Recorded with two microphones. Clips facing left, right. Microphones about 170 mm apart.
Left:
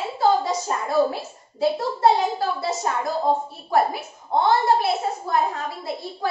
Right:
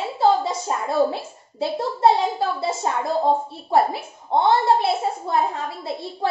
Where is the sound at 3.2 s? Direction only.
25° right (ahead or behind).